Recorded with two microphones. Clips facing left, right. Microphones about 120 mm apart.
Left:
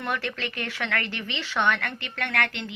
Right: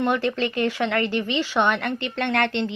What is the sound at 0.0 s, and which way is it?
A woman's voice, 25° right (ahead or behind).